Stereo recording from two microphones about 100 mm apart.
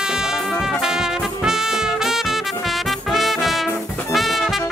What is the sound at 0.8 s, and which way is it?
Music, 5° right (ahead or behind).